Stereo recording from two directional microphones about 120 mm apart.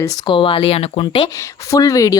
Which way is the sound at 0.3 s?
45° left (ahead or behind).